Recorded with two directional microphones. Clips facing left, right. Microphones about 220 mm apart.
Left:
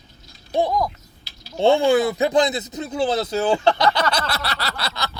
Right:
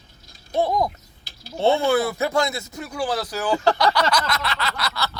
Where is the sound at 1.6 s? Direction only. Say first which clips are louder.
Left 3 dB; 15° left (ahead or behind).